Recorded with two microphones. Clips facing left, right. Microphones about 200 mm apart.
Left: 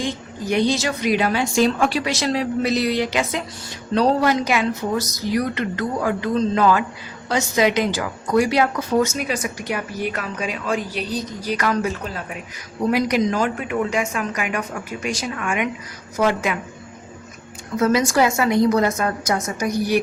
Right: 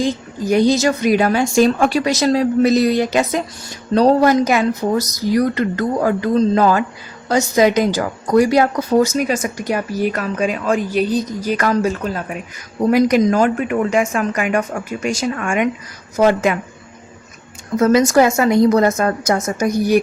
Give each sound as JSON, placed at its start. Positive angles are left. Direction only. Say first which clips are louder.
{"t": 0.0, "sound": "speech", "louder": "right 6 dB", "side_deg": -40}
{"t": 17.7, "sound": "speech", "louder": "right 5 dB", "side_deg": -45}